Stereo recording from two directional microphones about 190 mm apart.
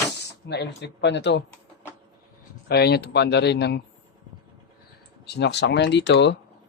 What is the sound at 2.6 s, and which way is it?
Speech, 60° left (ahead or behind).